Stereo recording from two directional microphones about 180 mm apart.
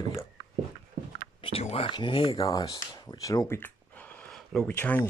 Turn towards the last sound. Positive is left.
turn(degrees=10)  # may be behind; listen again after turning